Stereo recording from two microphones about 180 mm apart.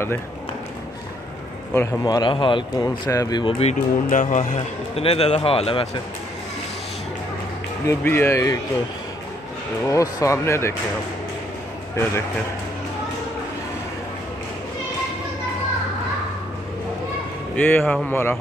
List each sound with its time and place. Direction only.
1.7 s speech: 15° left (ahead or behind); by 4.6 s 45° left (ahead or behind)
4.6 s speech: 30° left (ahead or behind)
7.8 s speech: 10° left (ahead or behind)
9.8 s speech: 15° left (ahead or behind)
17.6 s speech: 10° left (ahead or behind)